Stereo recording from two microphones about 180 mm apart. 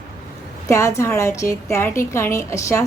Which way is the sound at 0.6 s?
15° left (ahead or behind).